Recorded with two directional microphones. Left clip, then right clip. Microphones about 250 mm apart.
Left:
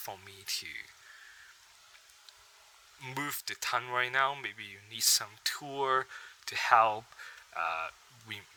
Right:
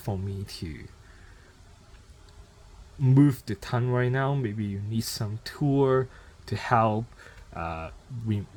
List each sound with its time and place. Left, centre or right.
0.0 s speech: centre
3.0 s speech: centre
5.6 s speech: centre